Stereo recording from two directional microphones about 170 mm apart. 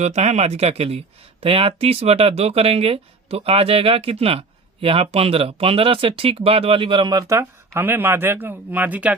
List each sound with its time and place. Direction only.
0.0 s speech: 40° right (ahead or behind); by 9.1 s 10° right (ahead or behind)